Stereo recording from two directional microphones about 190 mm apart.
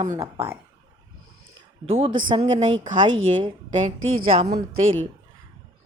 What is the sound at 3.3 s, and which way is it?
Speech, 25° right (ahead or behind).